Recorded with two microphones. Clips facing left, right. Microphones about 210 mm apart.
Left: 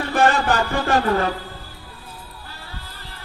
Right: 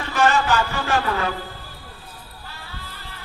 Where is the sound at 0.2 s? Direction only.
35° left (ahead or behind).